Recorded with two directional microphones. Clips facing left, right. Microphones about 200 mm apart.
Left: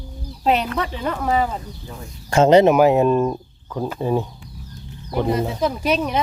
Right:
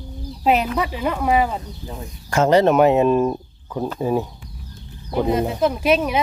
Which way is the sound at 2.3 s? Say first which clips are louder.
Left 3 dB; 25° left (ahead or behind).